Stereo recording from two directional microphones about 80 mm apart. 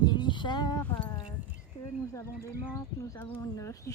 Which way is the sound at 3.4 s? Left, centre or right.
Left.